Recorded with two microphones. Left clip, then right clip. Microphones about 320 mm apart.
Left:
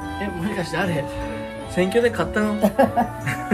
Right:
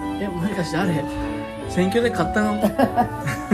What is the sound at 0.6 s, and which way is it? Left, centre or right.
Speech, centre.